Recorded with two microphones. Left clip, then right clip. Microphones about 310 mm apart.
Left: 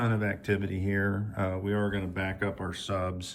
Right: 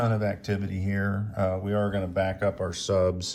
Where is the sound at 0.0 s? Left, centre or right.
Centre.